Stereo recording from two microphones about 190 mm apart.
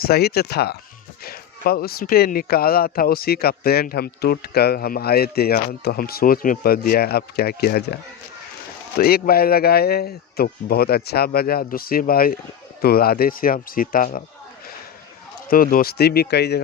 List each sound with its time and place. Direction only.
0.0 s speech: 55° left (ahead or behind)
9.0 s speech: 50° left (ahead or behind)
15.4 s speech: 50° left (ahead or behind)